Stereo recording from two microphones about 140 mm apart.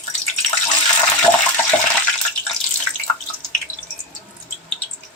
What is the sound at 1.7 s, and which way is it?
Water, 5° left (ahead or behind).